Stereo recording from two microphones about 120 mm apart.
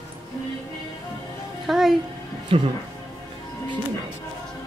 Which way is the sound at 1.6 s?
Centre (ahead or behind).